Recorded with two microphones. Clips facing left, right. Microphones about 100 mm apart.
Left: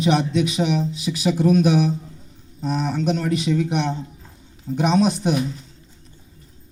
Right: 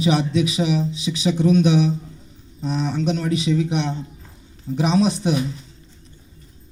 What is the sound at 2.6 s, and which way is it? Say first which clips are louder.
Speech: even; 40° left (ahead or behind).